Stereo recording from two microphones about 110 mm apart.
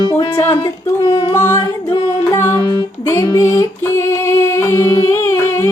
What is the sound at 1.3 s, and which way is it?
Music, 25° left (ahead or behind).